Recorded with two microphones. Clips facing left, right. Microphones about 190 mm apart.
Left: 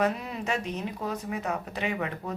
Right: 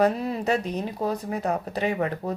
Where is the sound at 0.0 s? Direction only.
35° right (ahead or behind).